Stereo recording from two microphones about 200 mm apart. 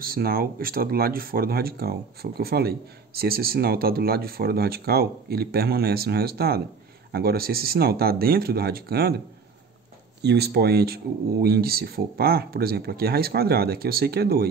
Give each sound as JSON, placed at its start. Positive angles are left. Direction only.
{"t": 0.0, "sound": "speech", "side_deg": -45}
{"t": 10.2, "sound": "speech", "side_deg": -55}